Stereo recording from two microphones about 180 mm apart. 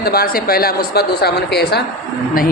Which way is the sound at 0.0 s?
55° left (ahead or behind).